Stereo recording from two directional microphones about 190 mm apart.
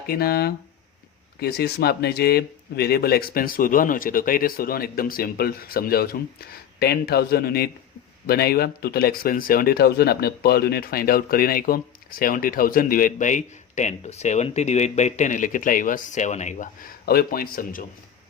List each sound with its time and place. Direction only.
0.1 s speech: 55° left (ahead or behind)